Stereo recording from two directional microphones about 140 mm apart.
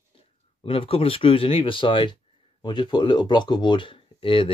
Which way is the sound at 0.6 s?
40° left (ahead or behind).